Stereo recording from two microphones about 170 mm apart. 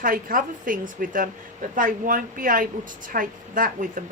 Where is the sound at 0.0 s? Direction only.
55° right (ahead or behind).